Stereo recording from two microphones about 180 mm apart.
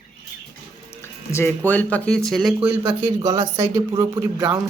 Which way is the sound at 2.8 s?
20° right (ahead or behind).